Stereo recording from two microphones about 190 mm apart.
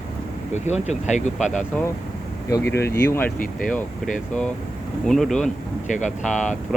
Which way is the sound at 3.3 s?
45° left (ahead or behind).